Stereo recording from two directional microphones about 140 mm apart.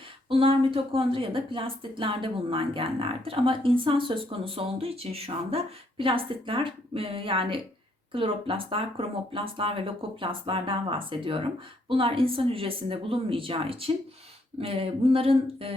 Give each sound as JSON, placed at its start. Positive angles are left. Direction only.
{"t": 0.3, "sound": "speech", "side_deg": -40}